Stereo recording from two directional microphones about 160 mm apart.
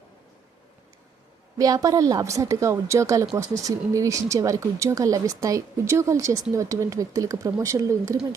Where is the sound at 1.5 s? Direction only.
20° right (ahead or behind).